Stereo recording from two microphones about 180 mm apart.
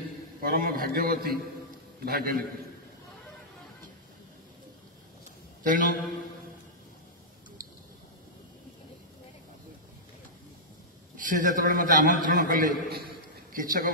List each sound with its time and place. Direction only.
0.4 s a man's voice: 50° right (ahead or behind)
5.6 s a man's voice: 45° right (ahead or behind)
11.1 s a man's voice: 50° right (ahead or behind)